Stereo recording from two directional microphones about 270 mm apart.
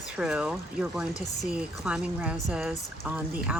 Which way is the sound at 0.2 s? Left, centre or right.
Centre.